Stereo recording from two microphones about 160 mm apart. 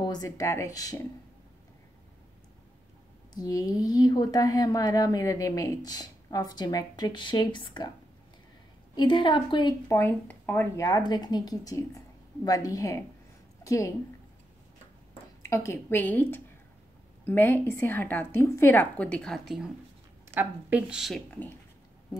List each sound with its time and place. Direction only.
0.0 s speech: 25° left (ahead or behind)
3.3 s speech: 20° left (ahead or behind)
8.9 s speech: 30° left (ahead or behind)
9.8 s speech: 15° left (ahead or behind)
15.4 s a woman's voice: 15° left (ahead or behind); by 21.2 s 5° right (ahead or behind)